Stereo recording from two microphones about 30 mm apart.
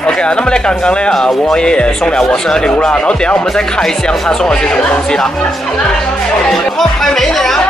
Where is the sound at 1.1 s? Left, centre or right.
Centre.